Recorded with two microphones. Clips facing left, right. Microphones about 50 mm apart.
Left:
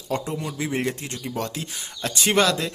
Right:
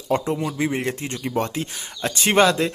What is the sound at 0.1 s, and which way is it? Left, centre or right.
Speech, right.